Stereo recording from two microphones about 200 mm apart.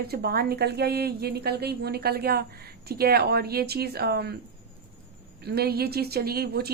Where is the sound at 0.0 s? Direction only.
50° right (ahead or behind).